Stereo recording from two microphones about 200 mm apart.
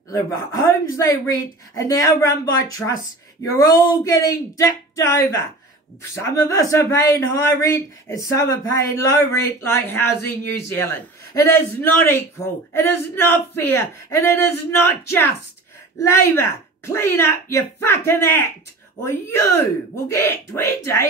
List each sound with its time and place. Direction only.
0.1 s speech: 15° left (ahead or behind)